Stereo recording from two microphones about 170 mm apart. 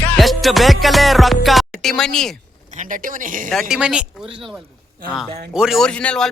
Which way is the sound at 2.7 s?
50° right (ahead or behind).